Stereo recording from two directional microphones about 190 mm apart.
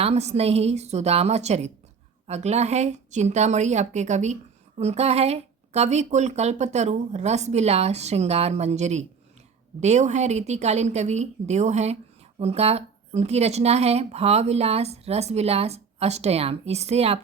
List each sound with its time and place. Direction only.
0.0 s speech: 35° right (ahead or behind)